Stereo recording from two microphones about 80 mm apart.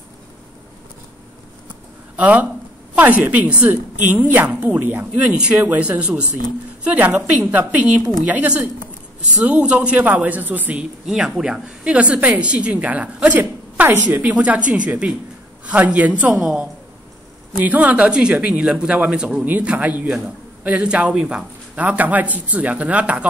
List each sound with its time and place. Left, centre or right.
2.1 s a woman's voice: centre
11.1 s a woman's voice: centre
17.6 s a woman's voice: centre